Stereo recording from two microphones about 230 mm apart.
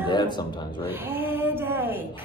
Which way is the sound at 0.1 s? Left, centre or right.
Centre.